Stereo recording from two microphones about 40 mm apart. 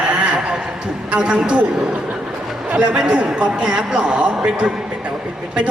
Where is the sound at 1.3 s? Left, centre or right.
Right.